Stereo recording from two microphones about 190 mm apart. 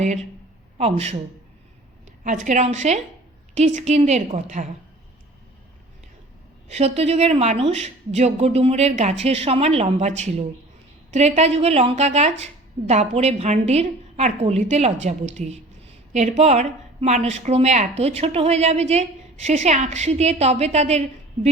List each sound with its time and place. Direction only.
0.8 s a woman's voice: 35° right (ahead or behind)
2.2 s a woman's voice: 40° right (ahead or behind)
6.7 s a woman's voice: 35° right (ahead or behind)